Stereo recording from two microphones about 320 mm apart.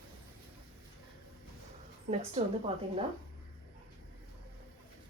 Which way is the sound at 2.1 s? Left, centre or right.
Centre.